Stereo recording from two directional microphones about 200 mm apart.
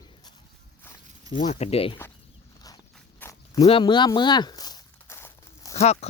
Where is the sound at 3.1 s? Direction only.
15° left (ahead or behind).